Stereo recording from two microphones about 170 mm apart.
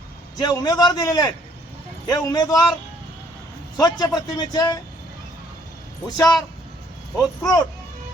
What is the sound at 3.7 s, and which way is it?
Speech, 25° left (ahead or behind).